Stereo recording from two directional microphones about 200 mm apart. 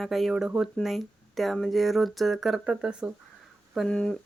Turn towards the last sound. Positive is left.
turn(degrees=5)  # may be behind; listen again after turning